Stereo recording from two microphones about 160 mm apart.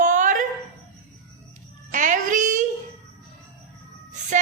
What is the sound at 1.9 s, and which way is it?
Child singing, 55° right (ahead or behind).